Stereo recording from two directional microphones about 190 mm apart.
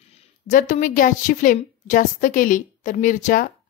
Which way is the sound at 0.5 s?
40° left (ahead or behind).